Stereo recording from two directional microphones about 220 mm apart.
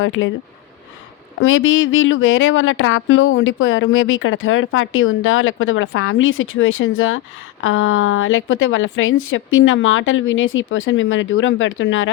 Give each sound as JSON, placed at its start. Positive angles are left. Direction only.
{"t": 0.0, "sound": "speech", "side_deg": 65}
{"t": 1.4, "sound": "speech", "side_deg": 65}